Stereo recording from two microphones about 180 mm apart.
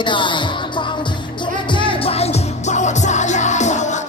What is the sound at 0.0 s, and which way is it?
Music, 25° left (ahead or behind).